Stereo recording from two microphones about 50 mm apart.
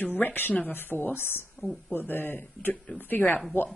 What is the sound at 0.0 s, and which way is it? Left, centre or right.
Speech, left.